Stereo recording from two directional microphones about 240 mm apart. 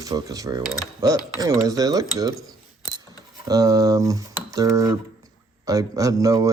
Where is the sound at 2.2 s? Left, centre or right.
Centre.